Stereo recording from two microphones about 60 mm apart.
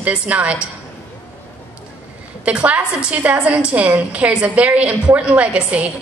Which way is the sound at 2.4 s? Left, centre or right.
Right.